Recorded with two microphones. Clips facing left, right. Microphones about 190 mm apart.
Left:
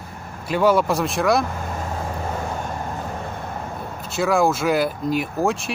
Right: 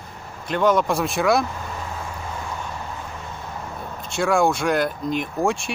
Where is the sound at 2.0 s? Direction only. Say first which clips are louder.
Left 5 dB; 45° left (ahead or behind).